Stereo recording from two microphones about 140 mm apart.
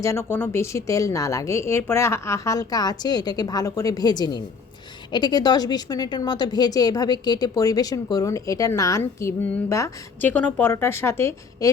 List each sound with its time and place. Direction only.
0.0 s a woman's voice: 20° left (ahead or behind)